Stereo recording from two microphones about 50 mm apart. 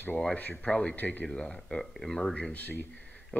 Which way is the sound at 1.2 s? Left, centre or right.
Centre.